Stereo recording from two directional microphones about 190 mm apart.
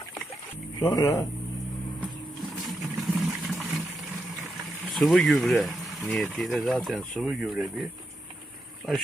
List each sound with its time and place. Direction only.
0.8 s speech: 20° left (ahead or behind)
2.6 s a sound: centre (ahead or behind)
4.9 s speech: centre (ahead or behind)